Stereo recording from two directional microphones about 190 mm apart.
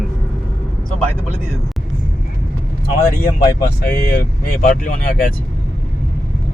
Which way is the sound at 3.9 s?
55° left (ahead or behind).